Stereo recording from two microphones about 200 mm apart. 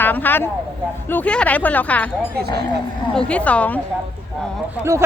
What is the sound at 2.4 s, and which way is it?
Speech, 50° right (ahead or behind).